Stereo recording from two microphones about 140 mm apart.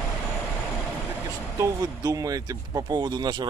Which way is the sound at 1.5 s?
25° right (ahead or behind).